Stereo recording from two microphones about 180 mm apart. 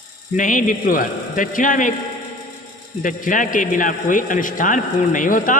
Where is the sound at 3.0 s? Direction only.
45° left (ahead or behind).